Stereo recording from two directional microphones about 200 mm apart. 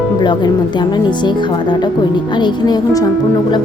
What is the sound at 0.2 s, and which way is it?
Speech, 20° left (ahead or behind).